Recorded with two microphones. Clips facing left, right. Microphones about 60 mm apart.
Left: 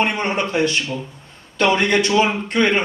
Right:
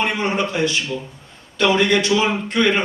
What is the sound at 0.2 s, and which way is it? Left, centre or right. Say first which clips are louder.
A man's voice: left 1 dB; left.